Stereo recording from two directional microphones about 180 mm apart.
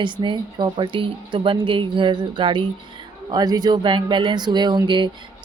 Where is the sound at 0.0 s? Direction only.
25° right (ahead or behind).